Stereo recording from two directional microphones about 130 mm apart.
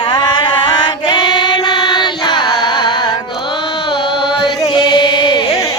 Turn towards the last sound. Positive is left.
turn(degrees=35)  # may be behind; listen again after turning